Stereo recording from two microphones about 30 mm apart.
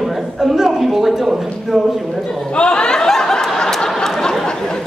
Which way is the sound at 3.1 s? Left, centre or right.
Centre.